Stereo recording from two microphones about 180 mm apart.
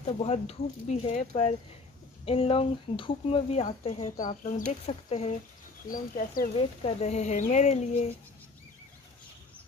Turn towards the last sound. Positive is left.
turn(degrees=40)  # may be behind; listen again after turning